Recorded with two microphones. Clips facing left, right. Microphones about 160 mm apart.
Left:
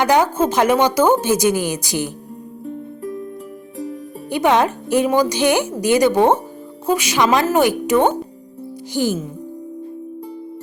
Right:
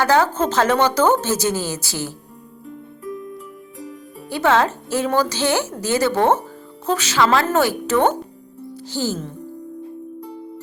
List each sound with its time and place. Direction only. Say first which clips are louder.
0.0 s a woman's voice: left 2 dB; 15° left (ahead or behind)
4.3 s a woman's voice: left 2 dB; 15° left (ahead or behind)